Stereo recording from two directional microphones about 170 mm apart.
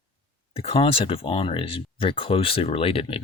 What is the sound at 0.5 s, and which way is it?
Speech, 35° left (ahead or behind).